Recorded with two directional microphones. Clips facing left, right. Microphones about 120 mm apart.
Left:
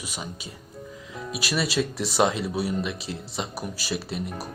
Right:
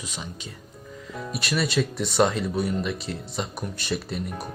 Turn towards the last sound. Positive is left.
turn(degrees=0)  # may be behind; listen again after turning